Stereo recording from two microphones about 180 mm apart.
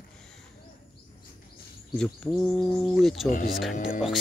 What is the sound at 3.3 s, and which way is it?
Speech, 50° left (ahead or behind).